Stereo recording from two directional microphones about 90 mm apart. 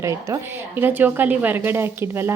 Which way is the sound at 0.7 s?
20° right (ahead or behind).